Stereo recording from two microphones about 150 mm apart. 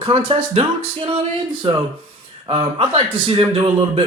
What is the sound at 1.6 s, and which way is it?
Speech, 35° right (ahead or behind).